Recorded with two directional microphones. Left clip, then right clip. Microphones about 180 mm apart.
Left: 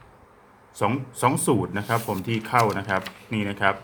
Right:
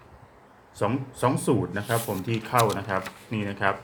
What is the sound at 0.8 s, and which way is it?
Speech, 15° left (ahead or behind).